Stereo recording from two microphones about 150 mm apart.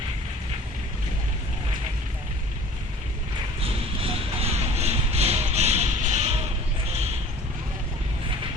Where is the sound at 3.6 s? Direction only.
40° right (ahead or behind).